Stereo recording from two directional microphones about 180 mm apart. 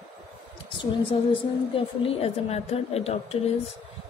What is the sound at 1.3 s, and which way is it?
A woman's voice, 30° left (ahead or behind).